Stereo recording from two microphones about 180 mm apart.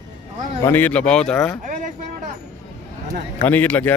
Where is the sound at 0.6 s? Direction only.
10° left (ahead or behind).